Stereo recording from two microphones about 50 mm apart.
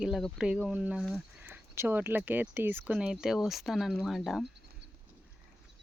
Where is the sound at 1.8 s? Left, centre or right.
Right.